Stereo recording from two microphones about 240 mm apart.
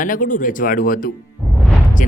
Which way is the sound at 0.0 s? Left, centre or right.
Left.